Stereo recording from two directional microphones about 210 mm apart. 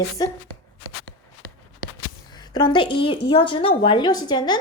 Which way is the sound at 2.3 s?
20° left (ahead or behind).